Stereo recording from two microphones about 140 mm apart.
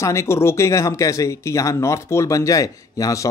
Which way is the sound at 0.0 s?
20° left (ahead or behind).